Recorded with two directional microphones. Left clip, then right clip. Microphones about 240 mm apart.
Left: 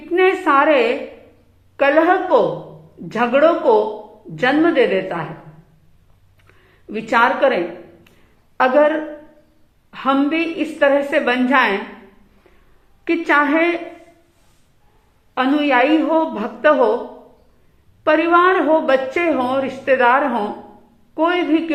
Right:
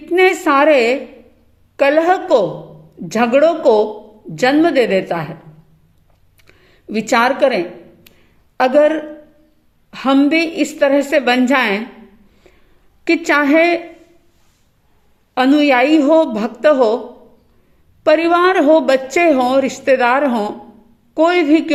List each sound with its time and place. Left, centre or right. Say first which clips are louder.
0.1 s a sound: right 2 dB; right
1.7 s a woman's voice: right 1 dB; right
6.5 s a woman's voice: right 5 dB; right
13.1 s a woman's voice: right 2 dB; right
15.4 s a woman's voice: right 3 dB; right
18.0 s a woman's voice: right 2 dB; right